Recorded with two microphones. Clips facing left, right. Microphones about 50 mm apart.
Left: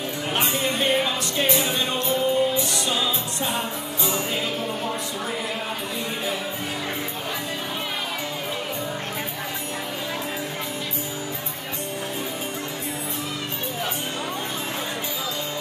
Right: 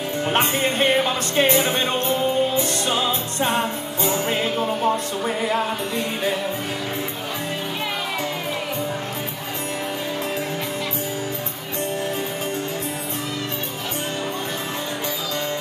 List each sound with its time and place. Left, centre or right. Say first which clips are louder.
0.3 s music: right 3 dB; right